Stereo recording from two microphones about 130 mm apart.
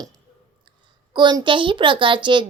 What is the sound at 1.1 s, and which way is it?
A woman's voice, 35° right (ahead or behind).